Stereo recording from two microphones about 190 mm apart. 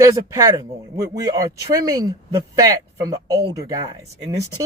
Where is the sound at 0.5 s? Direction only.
15° right (ahead or behind).